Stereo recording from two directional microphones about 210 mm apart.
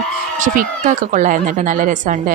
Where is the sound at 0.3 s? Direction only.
35° right (ahead or behind).